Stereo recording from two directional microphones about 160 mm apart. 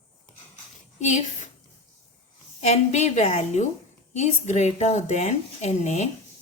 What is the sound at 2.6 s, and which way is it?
Speech, 45° left (ahead or behind).